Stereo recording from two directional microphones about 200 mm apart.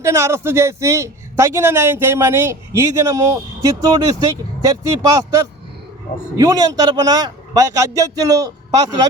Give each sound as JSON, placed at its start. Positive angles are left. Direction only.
{"t": 0.0, "sound": "a man's voice", "side_deg": -15}